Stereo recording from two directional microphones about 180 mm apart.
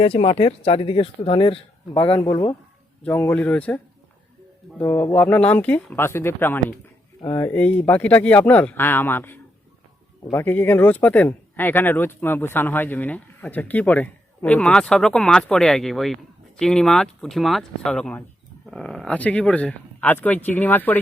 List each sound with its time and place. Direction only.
0.0 s speech: 35° left (ahead or behind)
2.1 s speech: 20° left (ahead or behind)
4.8 s speech: 15° left (ahead or behind)